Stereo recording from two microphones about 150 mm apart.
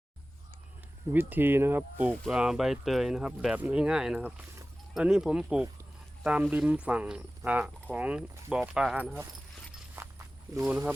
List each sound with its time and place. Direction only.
1.1 s speech: 15° right (ahead or behind)
10.0 s walk: 20° right (ahead or behind)
10.6 s speech: 10° right (ahead or behind)